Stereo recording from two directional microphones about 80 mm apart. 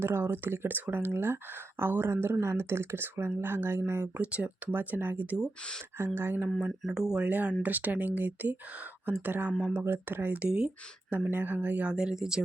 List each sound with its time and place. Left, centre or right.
0.0 s speech: right
4.2 s speech: centre
6.7 s speech: centre
7.3 s speech: right
11.3 s speech: right; by 12.4 s centre